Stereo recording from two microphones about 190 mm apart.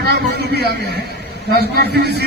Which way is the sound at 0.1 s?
60° right (ahead or behind).